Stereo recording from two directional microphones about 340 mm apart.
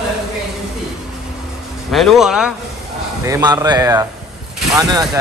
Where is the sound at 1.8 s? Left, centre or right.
Centre.